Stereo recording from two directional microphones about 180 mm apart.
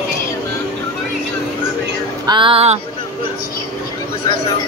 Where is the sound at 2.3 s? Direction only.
30° right (ahead or behind).